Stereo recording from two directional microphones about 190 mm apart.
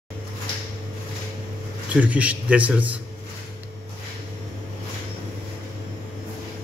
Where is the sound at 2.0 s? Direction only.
5° right (ahead or behind).